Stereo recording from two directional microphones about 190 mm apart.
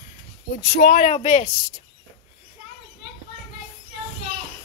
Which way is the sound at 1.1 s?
35° left (ahead or behind).